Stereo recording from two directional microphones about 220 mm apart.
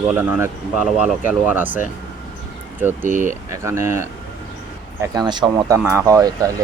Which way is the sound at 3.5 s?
10° right (ahead or behind).